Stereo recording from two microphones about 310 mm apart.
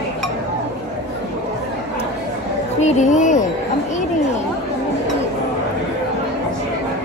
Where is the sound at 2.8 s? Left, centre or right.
Left.